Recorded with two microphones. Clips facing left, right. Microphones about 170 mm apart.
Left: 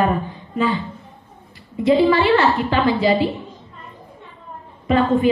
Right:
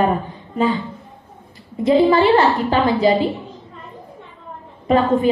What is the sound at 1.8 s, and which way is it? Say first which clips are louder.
A woman's voice: right 1 dB; 40° right (ahead or behind).